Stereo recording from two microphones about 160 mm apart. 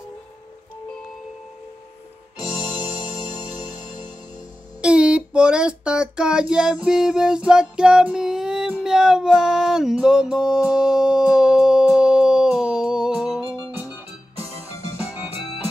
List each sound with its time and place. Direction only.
3.5 s music: 25° left (ahead or behind)
4.8 s a sound: 5° right (ahead or behind)
13.7 s music: 10° right (ahead or behind)
15.0 s organ: 10° right (ahead or behind)